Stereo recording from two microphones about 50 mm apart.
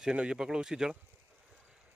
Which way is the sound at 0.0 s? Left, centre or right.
Centre.